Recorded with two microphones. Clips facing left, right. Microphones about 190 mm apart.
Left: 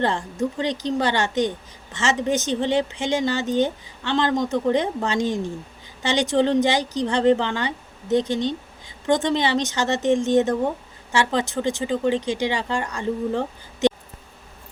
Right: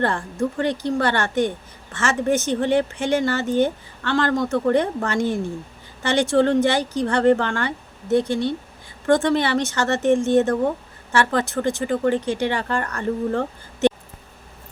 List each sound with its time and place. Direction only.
0.0 s a woman's voice: 20° left (ahead or behind)